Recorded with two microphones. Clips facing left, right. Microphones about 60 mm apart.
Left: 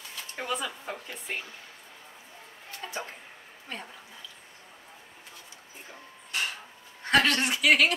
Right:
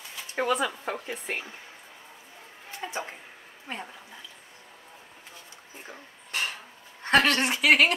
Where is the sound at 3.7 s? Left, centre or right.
Right.